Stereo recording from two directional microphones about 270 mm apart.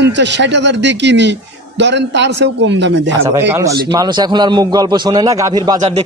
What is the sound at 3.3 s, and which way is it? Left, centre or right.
A man's voice, centre.